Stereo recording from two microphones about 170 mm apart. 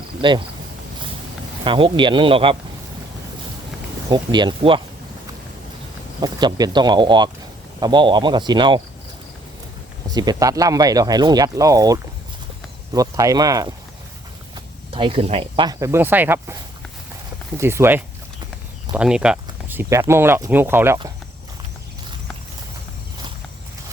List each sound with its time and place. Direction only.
0.2 s speech: 30° right (ahead or behind)
1.6 s speech: 30° right (ahead or behind)
4.1 s speech: 25° right (ahead or behind)
6.2 s speech: 25° right (ahead or behind)
10.2 s speech: 20° right (ahead or behind)
14.9 s speech: 30° right (ahead or behind)
15.8 s speech: 15° right (ahead or behind)
17.6 s speech: 15° right (ahead or behind)